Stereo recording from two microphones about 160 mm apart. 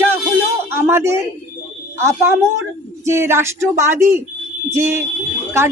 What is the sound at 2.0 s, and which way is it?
A woman's voice, 15° right (ahead or behind).